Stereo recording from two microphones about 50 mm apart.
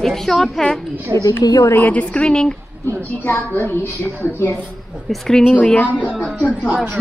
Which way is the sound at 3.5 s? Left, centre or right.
Left.